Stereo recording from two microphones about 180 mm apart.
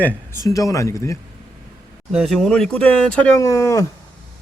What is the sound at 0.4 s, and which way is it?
Speech, 20° left (ahead or behind).